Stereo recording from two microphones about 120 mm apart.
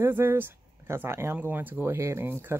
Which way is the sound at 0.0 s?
20° right (ahead or behind).